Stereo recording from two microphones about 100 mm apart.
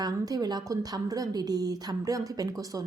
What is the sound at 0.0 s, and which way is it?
A woman's voice, 40° right (ahead or behind).